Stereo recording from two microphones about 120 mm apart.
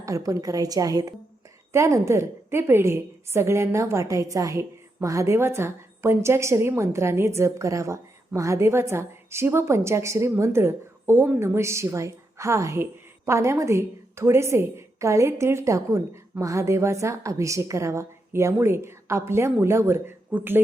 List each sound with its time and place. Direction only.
0.0 s a woman's voice: 30° right (ahead or behind)